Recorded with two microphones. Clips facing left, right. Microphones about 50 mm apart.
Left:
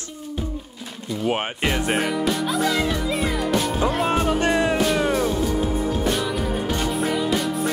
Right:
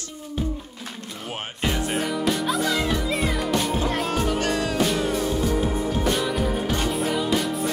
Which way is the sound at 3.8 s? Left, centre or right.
Left.